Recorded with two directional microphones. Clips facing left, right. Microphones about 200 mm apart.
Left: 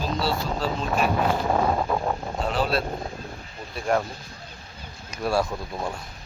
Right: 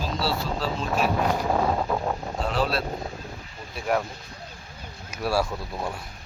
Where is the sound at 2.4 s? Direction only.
Centre (ahead or behind).